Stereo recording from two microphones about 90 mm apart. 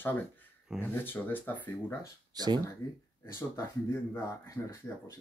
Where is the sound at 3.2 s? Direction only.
35° left (ahead or behind).